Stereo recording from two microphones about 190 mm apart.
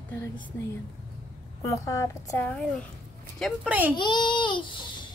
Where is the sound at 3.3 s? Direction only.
5° right (ahead or behind).